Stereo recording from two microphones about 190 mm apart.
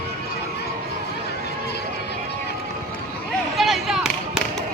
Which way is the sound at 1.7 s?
60° left (ahead or behind).